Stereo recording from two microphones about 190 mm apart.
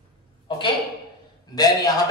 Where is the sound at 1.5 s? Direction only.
20° left (ahead or behind).